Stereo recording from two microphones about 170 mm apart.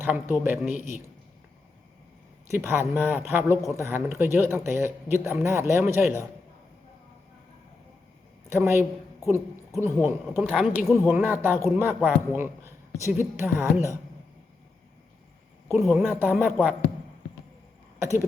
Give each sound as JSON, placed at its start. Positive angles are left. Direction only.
{"t": 0.0, "sound": "speech", "side_deg": -10}
{"t": 2.6, "sound": "speech", "side_deg": -15}
{"t": 8.4, "sound": "speech", "side_deg": -15}
{"t": 15.9, "sound": "speech", "side_deg": -5}
{"t": 18.0, "sound": "speech", "side_deg": -15}